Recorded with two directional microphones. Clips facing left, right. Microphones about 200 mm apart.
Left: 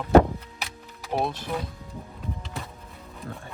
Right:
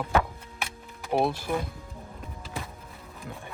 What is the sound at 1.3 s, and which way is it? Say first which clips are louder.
Speech: right 2 dB; 10° right (ahead or behind).